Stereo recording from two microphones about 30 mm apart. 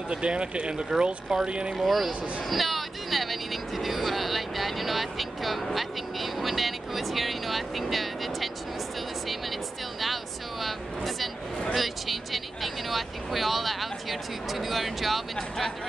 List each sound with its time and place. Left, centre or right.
0.1 s speech: right
1.8 s vehicle: centre
15.3 s speech: centre